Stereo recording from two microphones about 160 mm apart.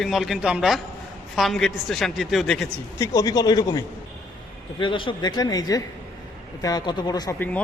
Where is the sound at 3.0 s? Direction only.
25° left (ahead or behind).